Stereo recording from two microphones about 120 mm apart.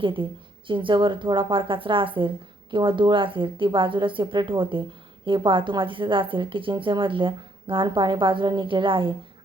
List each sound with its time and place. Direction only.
0.0 s a woman's voice: 45° right (ahead or behind)